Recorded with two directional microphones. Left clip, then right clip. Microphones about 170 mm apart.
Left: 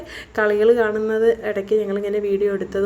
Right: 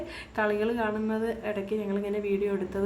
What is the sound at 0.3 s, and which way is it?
A woman's voice, 35° left (ahead or behind).